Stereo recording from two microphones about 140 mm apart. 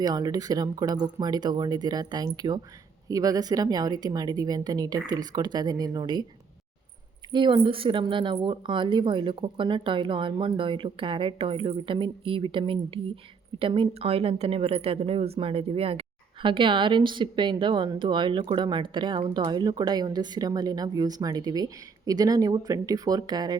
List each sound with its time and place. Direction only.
0.0 s speech: 30° right (ahead or behind)
7.3 s a woman's voice: 35° right (ahead or behind)